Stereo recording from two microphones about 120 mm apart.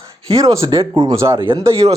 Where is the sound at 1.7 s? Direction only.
50° right (ahead or behind).